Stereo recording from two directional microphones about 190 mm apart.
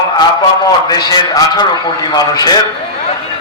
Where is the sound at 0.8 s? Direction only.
20° left (ahead or behind).